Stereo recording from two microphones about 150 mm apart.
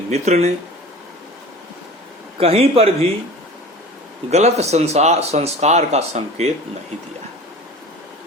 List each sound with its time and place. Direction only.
0.1 s speech: 45° right (ahead or behind)
2.4 s speech: 40° right (ahead or behind)
4.3 s speech: 45° right (ahead or behind)